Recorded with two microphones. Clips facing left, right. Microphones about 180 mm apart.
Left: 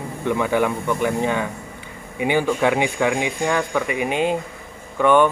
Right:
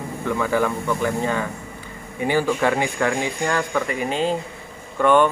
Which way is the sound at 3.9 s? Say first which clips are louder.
Left 3 dB; 15° left (ahead or behind).